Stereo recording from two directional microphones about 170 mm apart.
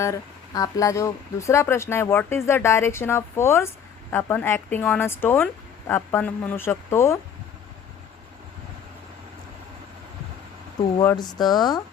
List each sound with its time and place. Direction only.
0.0 s speech: 20° left (ahead or behind)
11.2 s speech: 25° left (ahead or behind)